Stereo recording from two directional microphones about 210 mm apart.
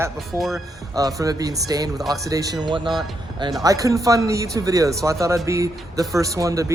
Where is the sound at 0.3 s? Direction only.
Centre (ahead or behind).